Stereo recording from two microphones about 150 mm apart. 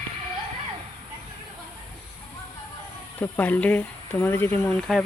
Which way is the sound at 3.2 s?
10° left (ahead or behind).